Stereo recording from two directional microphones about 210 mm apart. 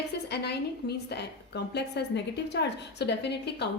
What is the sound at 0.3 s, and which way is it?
A woman's voice, 50° left (ahead or behind).